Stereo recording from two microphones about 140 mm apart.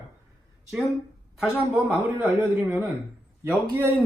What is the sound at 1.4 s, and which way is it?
A man's voice, 10° right (ahead or behind).